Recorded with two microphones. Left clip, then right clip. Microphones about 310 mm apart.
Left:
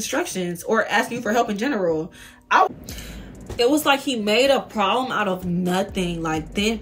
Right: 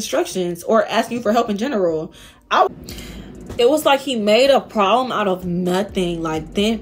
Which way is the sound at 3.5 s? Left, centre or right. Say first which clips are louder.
Right 4 dB; centre.